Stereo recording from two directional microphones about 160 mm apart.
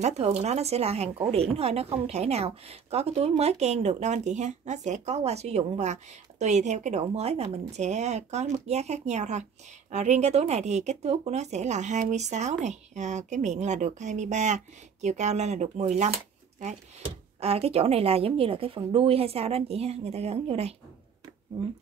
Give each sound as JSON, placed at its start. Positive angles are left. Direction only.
{"t": 0.0, "sound": "speech", "side_deg": -40}